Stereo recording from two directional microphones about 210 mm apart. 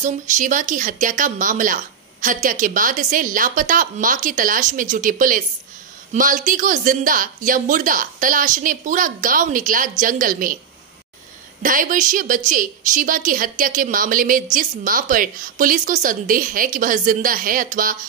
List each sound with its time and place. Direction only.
0.0 s a woman's voice: 35° right (ahead or behind)
11.6 s a woman's voice: 40° right (ahead or behind)